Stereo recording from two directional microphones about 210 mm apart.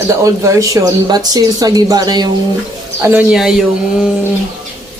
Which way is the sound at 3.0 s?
10° right (ahead or behind).